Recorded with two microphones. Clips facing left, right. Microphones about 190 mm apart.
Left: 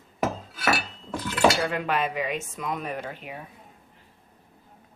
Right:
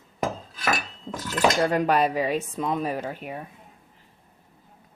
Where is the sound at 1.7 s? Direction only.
40° right (ahead or behind).